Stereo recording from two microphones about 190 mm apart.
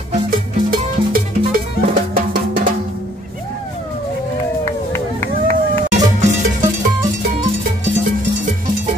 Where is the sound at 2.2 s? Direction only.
50° right (ahead or behind).